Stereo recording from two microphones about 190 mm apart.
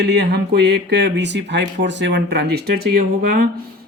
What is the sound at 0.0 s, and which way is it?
Speech, 65° right (ahead or behind).